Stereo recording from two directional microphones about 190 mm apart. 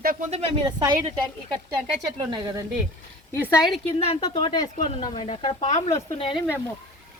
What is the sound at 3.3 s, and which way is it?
Speech, 15° left (ahead or behind).